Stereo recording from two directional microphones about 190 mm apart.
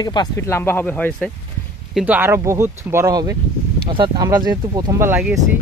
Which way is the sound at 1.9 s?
5° right (ahead or behind).